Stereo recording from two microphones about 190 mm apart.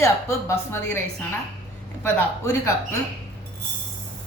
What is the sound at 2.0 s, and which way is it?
Speech, 15° left (ahead or behind).